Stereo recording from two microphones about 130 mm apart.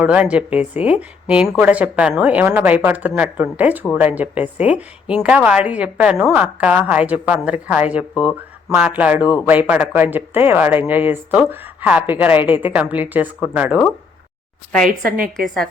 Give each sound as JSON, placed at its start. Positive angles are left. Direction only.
{"t": 0.0, "sound": "a woman's voice", "side_deg": -10}
{"t": 15.1, "sound": "a woman's voice", "side_deg": -90}
{"t": 15.4, "sound": "a woman's voice", "side_deg": 0}